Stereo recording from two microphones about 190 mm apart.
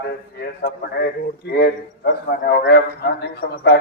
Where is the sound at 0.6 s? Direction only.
55° left (ahead or behind).